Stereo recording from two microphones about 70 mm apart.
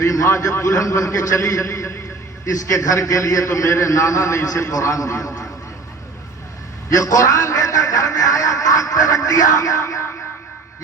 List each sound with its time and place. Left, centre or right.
0.0 s a man's voice: left
6.9 s a man's voice: left